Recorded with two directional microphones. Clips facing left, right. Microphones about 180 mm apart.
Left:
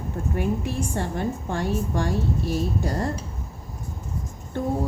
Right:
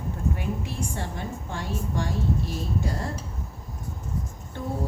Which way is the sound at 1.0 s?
45° left (ahead or behind).